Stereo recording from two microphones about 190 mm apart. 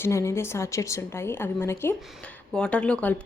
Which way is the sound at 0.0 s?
15° left (ahead or behind).